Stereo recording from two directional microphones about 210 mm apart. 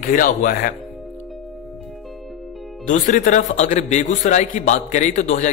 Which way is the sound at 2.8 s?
35° left (ahead or behind).